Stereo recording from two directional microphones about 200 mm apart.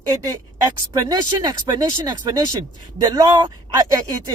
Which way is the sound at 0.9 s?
20° right (ahead or behind).